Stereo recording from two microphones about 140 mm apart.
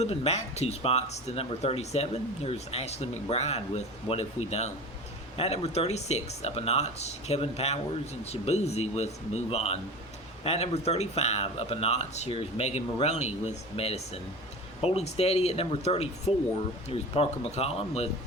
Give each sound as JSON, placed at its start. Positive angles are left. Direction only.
{"t": 0.0, "sound": "speech", "side_deg": 50}